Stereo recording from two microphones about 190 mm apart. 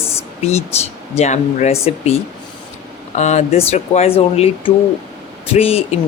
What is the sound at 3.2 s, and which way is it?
Speech, 35° left (ahead or behind).